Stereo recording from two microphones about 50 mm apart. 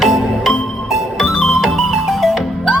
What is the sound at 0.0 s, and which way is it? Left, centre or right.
Music, centre.